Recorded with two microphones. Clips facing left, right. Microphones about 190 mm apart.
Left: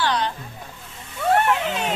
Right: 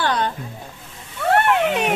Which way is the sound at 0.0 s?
50° right (ahead or behind).